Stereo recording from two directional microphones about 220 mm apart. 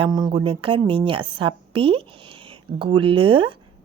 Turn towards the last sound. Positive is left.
turn(degrees=-25)  # may be behind; listen again after turning